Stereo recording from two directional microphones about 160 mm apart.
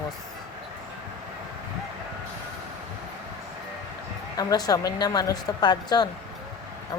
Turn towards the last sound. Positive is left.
turn(degrees=25)  # may be behind; listen again after turning